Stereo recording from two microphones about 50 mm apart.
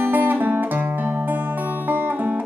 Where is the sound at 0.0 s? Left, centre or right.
Right.